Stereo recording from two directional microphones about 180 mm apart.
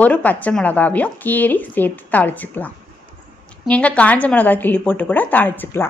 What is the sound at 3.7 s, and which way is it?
A woman's voice, 5° left (ahead or behind).